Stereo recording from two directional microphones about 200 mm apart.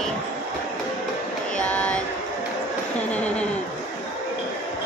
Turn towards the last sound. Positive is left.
turn(degrees=5)  # may be behind; listen again after turning